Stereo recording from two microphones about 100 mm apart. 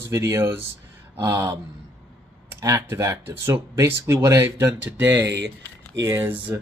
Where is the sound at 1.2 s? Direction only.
30° right (ahead or behind).